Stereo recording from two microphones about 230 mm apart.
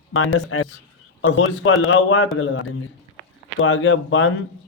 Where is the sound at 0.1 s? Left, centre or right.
Left.